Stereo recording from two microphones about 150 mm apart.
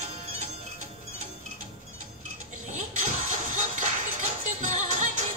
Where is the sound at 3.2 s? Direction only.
55° right (ahead or behind).